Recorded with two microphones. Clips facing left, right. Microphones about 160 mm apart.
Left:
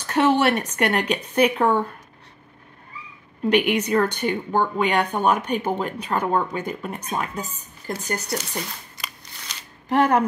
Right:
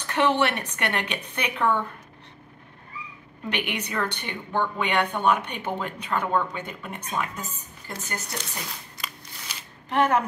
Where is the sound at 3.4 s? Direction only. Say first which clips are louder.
Left 11 dB; 40° left (ahead or behind).